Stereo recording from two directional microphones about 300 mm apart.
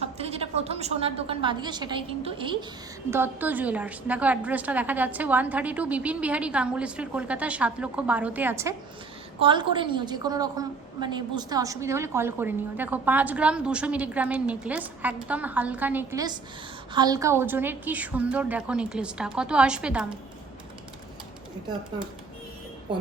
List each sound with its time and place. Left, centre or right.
0.0 s a woman's voice: right; by 20.1 s centre